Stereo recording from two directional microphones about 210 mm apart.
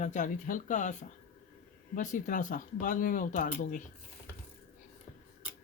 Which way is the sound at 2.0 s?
40° left (ahead or behind).